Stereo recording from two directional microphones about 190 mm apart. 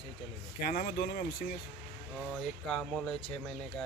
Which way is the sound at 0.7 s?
45° left (ahead or behind).